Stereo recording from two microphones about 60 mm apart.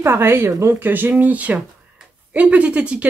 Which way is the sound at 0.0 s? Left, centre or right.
Right.